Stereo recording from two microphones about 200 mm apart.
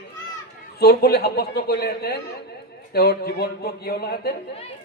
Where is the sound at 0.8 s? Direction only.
50° left (ahead or behind).